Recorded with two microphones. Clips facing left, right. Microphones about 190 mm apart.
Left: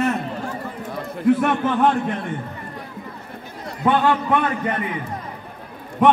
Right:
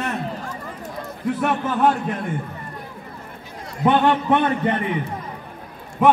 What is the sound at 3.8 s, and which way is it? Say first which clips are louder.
Speech: right 1 dB; 20° right (ahead or behind).